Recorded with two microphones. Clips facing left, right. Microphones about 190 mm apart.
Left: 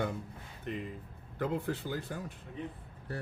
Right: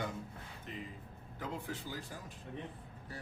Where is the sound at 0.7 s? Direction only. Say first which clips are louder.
Left 8 dB; 65° left (ahead or behind).